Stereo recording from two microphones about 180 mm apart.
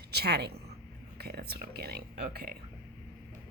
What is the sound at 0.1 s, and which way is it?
Speech, 65° right (ahead or behind).